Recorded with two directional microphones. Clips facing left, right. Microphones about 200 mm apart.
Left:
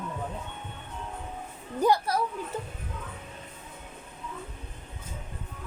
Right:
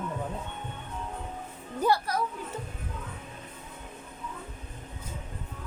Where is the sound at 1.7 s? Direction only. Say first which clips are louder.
Left 2 dB; 15° left (ahead or behind).